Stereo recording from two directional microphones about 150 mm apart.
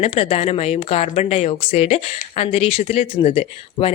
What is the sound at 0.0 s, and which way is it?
A woman's voice, 40° left (ahead or behind).